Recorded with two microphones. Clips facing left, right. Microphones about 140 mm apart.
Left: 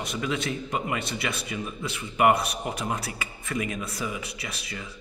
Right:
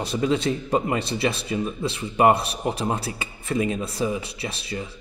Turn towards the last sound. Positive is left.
turn(degrees=-30)  # may be behind; listen again after turning